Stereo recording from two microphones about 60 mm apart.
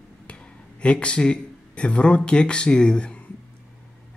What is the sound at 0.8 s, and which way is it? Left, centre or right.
Speech, centre.